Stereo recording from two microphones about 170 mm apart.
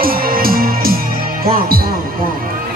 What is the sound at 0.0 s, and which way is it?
Music, 60° right (ahead or behind).